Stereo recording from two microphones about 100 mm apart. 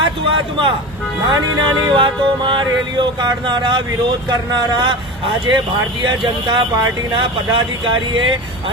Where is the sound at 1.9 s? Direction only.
55° right (ahead or behind).